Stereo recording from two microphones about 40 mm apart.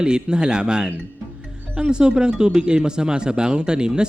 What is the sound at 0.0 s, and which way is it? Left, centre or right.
A man's voice, right.